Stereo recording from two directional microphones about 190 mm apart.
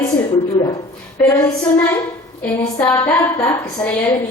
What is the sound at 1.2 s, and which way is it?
A woman's voice, 10° left (ahead or behind).